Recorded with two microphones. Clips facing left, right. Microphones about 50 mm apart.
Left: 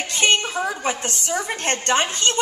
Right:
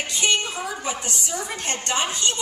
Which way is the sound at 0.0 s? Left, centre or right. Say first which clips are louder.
Left 3 dB; left.